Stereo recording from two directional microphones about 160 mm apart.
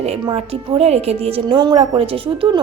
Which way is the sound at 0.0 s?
40° right (ahead or behind).